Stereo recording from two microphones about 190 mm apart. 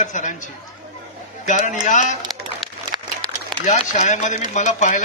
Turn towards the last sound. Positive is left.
turn(degrees=40)  # may be behind; listen again after turning